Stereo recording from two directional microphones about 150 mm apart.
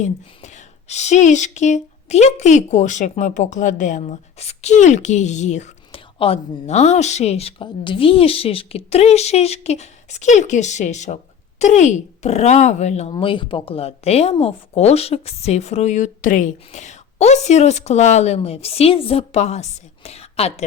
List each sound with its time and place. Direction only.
0.0 s speech: 50° left (ahead or behind)
4.0 s a woman's voice: 45° left (ahead or behind)
6.1 s speech: 40° left (ahead or behind)